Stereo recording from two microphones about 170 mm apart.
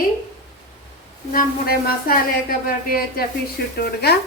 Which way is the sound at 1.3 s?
60° left (ahead or behind).